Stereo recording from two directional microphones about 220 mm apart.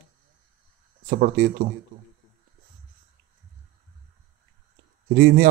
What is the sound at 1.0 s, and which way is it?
Speech, 35° right (ahead or behind).